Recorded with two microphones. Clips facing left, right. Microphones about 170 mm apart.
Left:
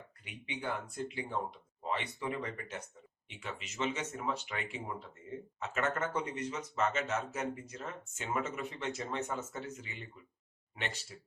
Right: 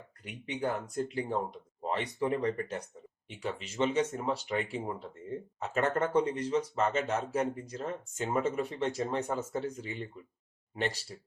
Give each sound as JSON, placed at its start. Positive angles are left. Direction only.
{"t": 0.3, "sound": "speech", "side_deg": -40}